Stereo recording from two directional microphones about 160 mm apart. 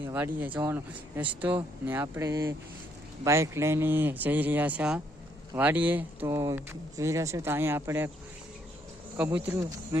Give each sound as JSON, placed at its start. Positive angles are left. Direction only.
{"t": 0.0, "sound": "a sound", "side_deg": -10}
{"t": 0.3, "sound": "speech", "side_deg": -10}
{"t": 9.1, "sound": "speech", "side_deg": -10}